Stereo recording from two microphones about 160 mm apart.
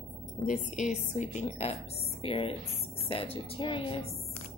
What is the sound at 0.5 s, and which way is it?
A woman's voice, 50° left (ahead or behind).